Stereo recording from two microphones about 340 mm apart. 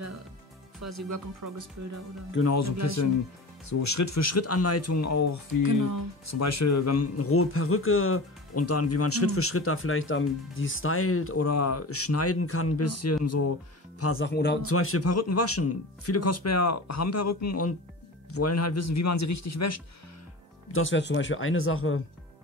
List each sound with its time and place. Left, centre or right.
0.8 s speech: right
2.3 s speech: left
5.6 s speech: right
6.2 s speech: left
20.7 s speech: left